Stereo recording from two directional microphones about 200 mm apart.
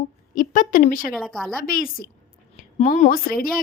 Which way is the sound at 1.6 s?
45° left (ahead or behind).